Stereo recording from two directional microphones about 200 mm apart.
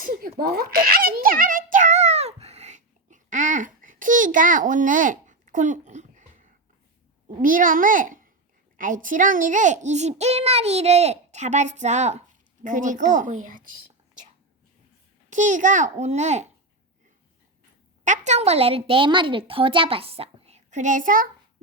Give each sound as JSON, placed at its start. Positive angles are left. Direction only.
{"t": 0.0, "sound": "giggle", "side_deg": -45}
{"t": 7.4, "sound": "a child's voice", "side_deg": -45}
{"t": 15.3, "sound": "a child's voice", "side_deg": -40}
{"t": 18.0, "sound": "a woman's voice", "side_deg": -35}